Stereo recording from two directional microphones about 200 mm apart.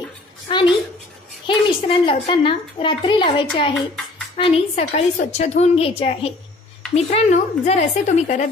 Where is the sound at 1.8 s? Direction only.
25° left (ahead or behind).